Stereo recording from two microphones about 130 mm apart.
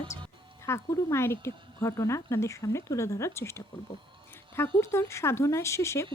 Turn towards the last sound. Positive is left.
turn(degrees=20)  # may be behind; listen again after turning